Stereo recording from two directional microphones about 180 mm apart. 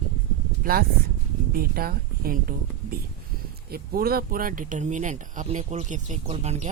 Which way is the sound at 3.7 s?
55° right (ahead or behind).